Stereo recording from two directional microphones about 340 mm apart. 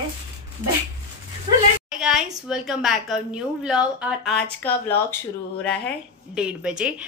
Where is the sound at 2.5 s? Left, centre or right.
Centre.